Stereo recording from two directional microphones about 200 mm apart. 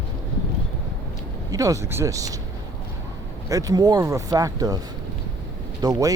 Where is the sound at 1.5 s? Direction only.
15° right (ahead or behind).